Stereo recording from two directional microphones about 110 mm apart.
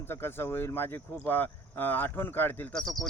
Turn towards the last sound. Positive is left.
turn(degrees=5)  # may be behind; listen again after turning